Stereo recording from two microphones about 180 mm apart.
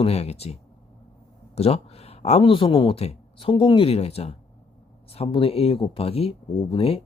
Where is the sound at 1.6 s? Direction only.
35° left (ahead or behind).